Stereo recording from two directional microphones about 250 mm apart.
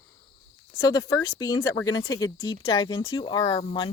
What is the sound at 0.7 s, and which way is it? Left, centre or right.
Speech, centre.